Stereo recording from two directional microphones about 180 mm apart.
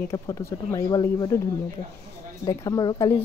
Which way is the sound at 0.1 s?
15° left (ahead or behind).